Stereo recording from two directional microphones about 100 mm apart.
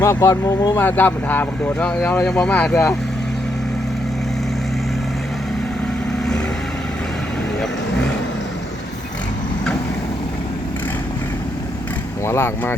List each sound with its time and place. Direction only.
0.0 s speech: 30° left (ahead or behind)
0.8 s speech: 20° left (ahead or behind)
12.2 s speech: 25° left (ahead or behind)